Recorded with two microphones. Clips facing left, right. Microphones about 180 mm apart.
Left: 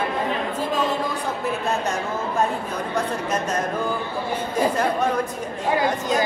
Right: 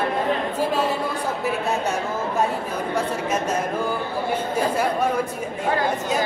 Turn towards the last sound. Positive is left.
turn(degrees=-10)  # may be behind; listen again after turning